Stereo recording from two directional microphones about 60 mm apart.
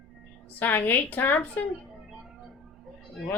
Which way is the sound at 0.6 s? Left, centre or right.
Left.